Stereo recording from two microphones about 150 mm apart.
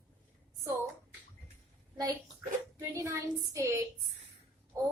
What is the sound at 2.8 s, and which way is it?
A woman's voice, 20° right (ahead or behind).